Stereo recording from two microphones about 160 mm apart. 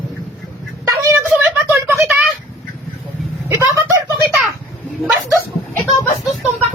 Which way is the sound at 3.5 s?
15° right (ahead or behind).